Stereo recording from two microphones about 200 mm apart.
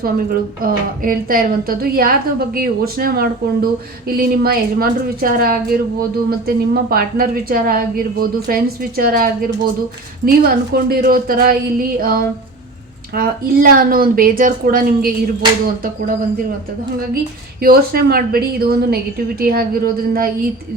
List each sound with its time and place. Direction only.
0.0 s a woman's voice: 45° right (ahead or behind)
17.6 s a woman's voice: 50° right (ahead or behind)